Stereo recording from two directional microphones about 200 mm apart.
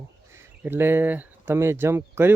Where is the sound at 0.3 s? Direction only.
10° right (ahead or behind).